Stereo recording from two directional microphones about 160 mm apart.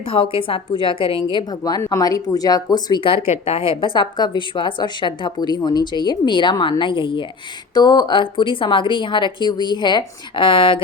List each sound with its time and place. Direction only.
0.0 s a woman's voice: 35° left (ahead or behind)